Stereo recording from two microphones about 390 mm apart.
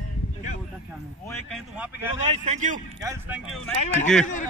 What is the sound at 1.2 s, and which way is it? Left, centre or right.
Speech, centre.